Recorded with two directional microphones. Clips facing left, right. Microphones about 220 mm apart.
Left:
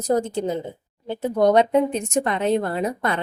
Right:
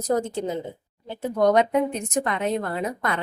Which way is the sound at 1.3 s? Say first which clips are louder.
Left 2 dB; 30° left (ahead or behind).